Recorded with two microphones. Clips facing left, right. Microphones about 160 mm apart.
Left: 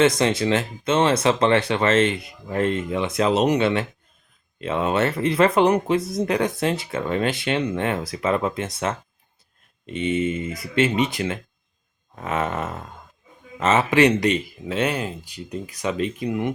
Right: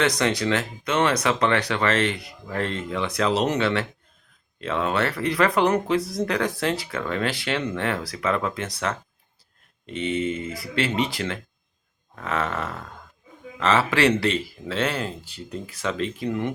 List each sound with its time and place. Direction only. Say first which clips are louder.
0.0 s speech: left 4 dB; 20° left (ahead or behind)